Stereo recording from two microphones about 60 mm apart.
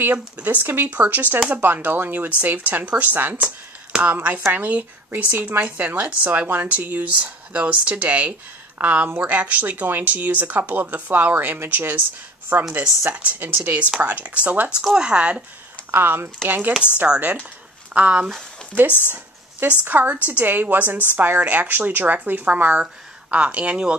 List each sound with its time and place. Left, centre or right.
0.0 s speech: right
14.8 s speech: centre
15.9 s speech: right
17.1 s speech: right